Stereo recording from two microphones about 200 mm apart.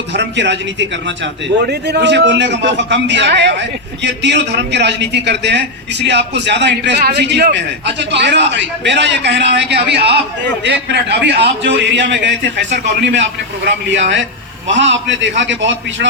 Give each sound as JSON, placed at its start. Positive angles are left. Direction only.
{"t": 0.1, "sound": "a man's voice", "side_deg": -60}
{"t": 14.7, "sound": "a man's voice", "side_deg": -65}